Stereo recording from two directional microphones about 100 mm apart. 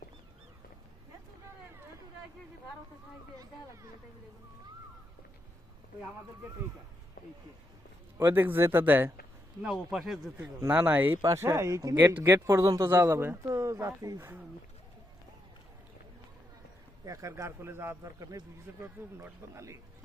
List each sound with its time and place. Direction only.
8.2 s speech: 20° right (ahead or behind)
9.6 s speech: centre (ahead or behind)
10.3 s speech: 20° right (ahead or behind)
11.2 s a man's voice: 30° right (ahead or behind)
11.9 s speech: 20° right (ahead or behind)
17.1 s a man's voice: 30° right (ahead or behind)